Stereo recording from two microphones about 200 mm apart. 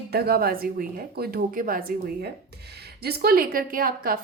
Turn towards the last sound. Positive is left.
turn(degrees=-45)  # may be behind; listen again after turning